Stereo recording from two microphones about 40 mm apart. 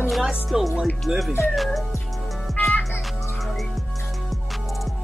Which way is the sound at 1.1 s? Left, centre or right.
Right.